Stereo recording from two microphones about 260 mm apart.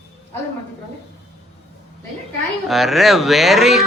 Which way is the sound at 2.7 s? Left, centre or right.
Centre.